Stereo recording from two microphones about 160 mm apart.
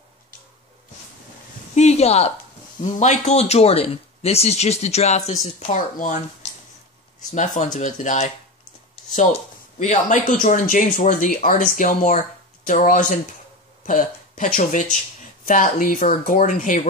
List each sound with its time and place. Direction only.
1.8 s speech: 40° left (ahead or behind)
7.3 s speech: 50° left (ahead or behind)